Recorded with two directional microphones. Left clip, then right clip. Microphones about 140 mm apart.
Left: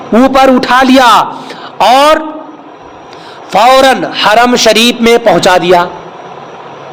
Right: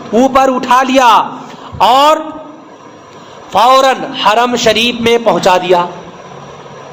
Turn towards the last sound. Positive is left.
turn(degrees=45)  # may be behind; listen again after turning